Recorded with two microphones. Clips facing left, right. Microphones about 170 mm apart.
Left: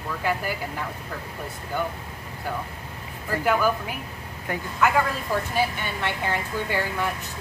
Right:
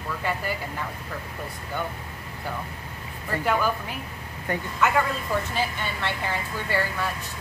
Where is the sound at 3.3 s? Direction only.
10° left (ahead or behind).